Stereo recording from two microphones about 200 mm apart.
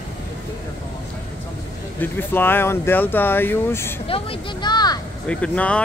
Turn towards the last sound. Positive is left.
turn(degrees=5)  # may be behind; listen again after turning